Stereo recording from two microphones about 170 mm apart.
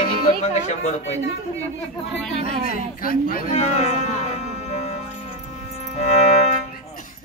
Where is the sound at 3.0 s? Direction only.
55° left (ahead or behind).